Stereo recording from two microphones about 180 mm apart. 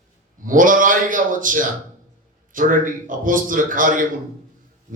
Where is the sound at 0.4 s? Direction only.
50° right (ahead or behind).